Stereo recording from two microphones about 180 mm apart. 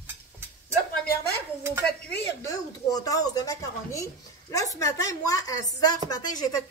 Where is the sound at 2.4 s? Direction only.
20° left (ahead or behind).